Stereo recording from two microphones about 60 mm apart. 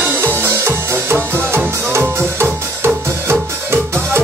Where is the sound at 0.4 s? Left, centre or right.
Right.